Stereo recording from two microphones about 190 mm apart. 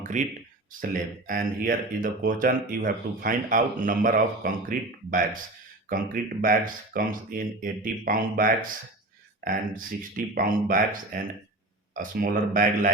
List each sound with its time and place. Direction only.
0.1 s speech: 40° right (ahead or behind)
6.9 s speech: 50° right (ahead or behind)